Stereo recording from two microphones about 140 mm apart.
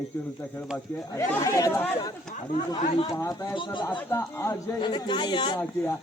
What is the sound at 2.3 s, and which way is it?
Speech, 65° left (ahead or behind).